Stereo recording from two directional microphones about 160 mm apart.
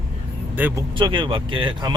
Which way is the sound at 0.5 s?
10° right (ahead or behind).